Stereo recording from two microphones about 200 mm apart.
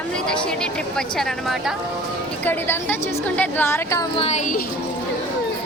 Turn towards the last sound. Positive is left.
turn(degrees=35)  # may be behind; listen again after turning